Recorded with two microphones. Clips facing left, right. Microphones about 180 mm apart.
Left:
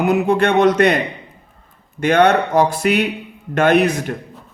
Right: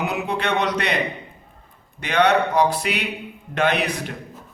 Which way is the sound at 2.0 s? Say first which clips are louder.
Left 5 dB; 45° left (ahead or behind).